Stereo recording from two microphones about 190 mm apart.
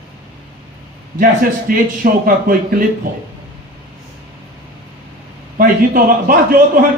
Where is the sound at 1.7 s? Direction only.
50° right (ahead or behind).